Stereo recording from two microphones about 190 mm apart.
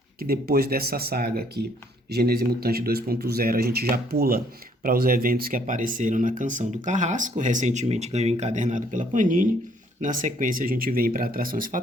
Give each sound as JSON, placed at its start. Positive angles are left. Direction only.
{"t": 0.2, "sound": "speech", "side_deg": -50}